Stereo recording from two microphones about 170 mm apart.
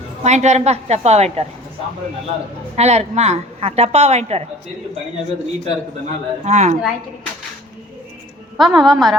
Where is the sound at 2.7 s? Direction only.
40° right (ahead or behind).